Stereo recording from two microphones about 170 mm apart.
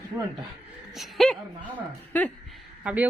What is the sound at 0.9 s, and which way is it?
Speech, centre (ahead or behind).